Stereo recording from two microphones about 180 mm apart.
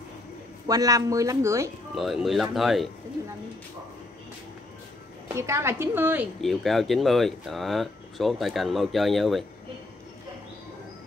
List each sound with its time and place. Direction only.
0.7 s speech: 20° right (ahead or behind)
2.0 s speech: centre (ahead or behind)
5.3 s speech: 15° right (ahead or behind)
6.4 s speech: centre (ahead or behind)